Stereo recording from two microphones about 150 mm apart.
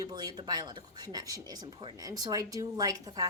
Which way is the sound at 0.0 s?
25° right (ahead or behind).